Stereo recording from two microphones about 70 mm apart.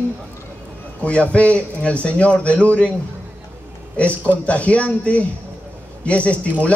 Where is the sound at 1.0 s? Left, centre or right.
Centre.